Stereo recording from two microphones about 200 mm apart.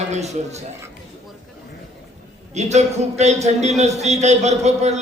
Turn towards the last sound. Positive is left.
turn(degrees=-35)  # may be behind; listen again after turning